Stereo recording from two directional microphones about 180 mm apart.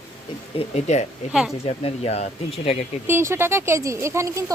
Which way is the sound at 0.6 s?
35° left (ahead or behind).